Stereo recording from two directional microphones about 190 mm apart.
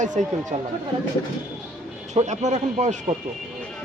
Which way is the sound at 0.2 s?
35° right (ahead or behind).